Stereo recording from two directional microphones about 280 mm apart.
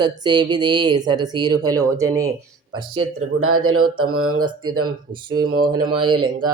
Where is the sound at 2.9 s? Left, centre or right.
Right.